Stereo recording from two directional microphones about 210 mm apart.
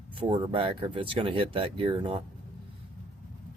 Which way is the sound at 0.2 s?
25° right (ahead or behind).